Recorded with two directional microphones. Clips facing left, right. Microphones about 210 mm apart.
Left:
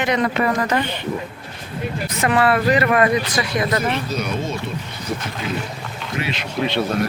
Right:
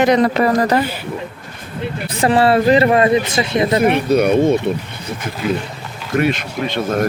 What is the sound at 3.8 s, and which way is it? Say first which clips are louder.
Speech: right 10 dB; 60° right (ahead or behind).